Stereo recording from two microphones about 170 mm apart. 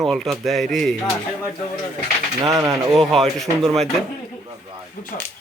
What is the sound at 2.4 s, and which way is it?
Speech, 20° right (ahead or behind).